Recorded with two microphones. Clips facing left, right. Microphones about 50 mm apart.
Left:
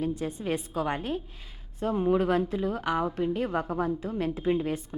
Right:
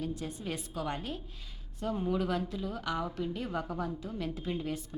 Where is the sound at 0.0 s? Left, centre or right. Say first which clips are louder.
Left 7 dB; left.